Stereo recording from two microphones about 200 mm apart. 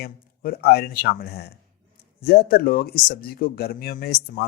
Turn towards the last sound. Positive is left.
turn(degrees=50)  # may be behind; listen again after turning